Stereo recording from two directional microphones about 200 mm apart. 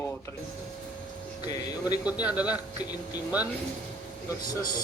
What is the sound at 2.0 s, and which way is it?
Speech, 5° right (ahead or behind).